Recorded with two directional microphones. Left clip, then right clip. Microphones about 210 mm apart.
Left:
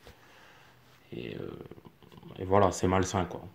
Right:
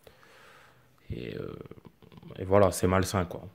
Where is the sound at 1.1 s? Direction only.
35° right (ahead or behind).